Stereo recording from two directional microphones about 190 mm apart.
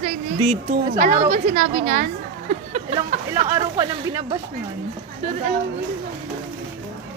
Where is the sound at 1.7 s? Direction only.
35° right (ahead or behind).